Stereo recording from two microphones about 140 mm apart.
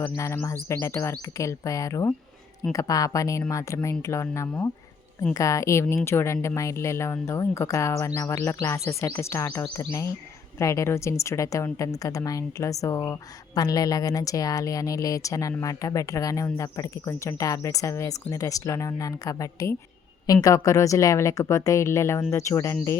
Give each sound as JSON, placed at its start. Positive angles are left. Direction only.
{"t": 0.0, "sound": "a woman's voice", "side_deg": 20}